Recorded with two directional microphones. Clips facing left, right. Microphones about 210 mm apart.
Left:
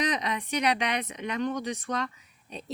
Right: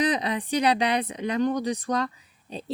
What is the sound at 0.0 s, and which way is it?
Speech, 30° right (ahead or behind).